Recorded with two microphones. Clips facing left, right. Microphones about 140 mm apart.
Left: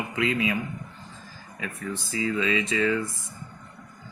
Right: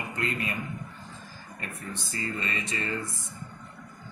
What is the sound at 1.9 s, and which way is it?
Speech, 90° left.